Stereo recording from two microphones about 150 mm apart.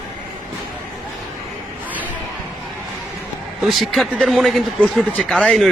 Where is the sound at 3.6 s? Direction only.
Centre (ahead or behind).